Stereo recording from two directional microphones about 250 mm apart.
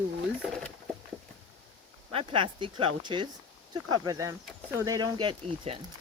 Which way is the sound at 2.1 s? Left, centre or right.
Right.